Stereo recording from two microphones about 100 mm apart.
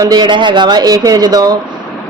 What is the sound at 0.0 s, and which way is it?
Speech, 45° right (ahead or behind).